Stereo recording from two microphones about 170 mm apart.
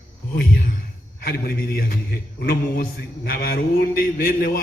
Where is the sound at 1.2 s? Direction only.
60° left (ahead or behind).